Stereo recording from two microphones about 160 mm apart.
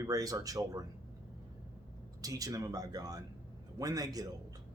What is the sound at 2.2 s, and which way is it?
Speech, 20° right (ahead or behind).